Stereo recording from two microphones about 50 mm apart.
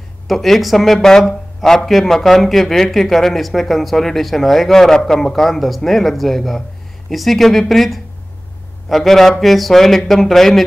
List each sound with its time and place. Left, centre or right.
0.3 s speech: centre